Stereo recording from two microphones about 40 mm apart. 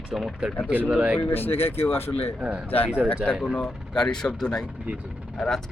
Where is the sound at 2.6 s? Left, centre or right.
Left.